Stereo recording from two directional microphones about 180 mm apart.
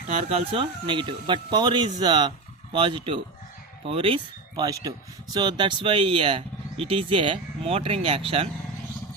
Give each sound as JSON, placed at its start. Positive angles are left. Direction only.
{"t": 0.3, "sound": "speech", "side_deg": -30}